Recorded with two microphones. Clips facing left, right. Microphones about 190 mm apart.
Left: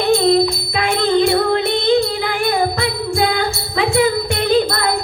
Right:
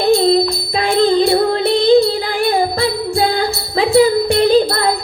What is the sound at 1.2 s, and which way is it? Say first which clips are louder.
Music: right 2 dB; 35° right (ahead or behind).